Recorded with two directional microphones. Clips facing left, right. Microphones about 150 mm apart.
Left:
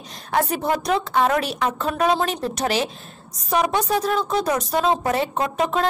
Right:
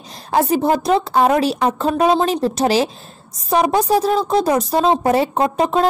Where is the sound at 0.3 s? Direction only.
30° right (ahead or behind).